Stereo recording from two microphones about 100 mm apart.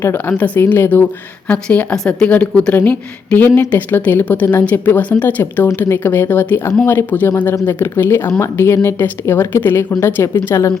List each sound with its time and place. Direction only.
0.0 s a woman's voice: 20° left (ahead or behind)